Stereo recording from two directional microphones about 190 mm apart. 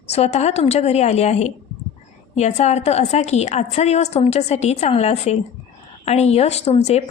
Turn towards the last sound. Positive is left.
turn(degrees=35)  # may be behind; listen again after turning